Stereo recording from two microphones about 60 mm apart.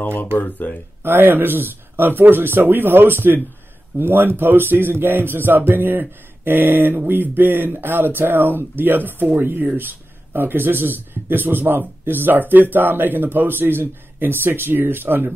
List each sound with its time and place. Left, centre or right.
0.0 s speech: left
1.0 s speech: right